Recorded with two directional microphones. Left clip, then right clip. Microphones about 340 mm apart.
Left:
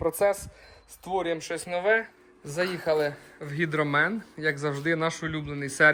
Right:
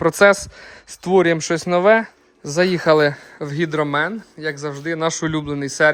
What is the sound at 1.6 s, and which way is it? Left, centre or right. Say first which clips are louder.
Speech: right 10 dB; centre.